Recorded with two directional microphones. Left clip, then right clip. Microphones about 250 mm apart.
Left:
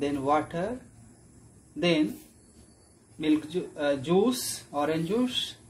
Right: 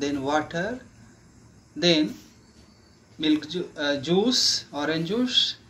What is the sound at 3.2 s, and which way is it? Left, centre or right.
Speech, centre.